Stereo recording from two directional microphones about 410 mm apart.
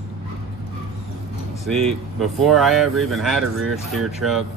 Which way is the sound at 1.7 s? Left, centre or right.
Centre.